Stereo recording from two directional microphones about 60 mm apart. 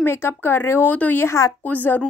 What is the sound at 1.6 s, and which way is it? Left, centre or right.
Speech, left.